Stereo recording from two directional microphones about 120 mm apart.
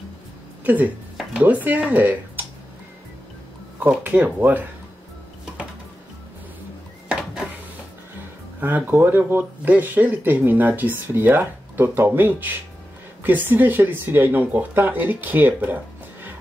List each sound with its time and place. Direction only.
0.7 s speech: 15° right (ahead or behind)
3.8 s speech: 15° right (ahead or behind)
8.5 s speech: 15° right (ahead or behind)